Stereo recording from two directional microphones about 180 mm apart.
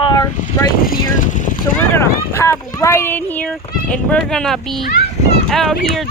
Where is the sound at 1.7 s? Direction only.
15° left (ahead or behind).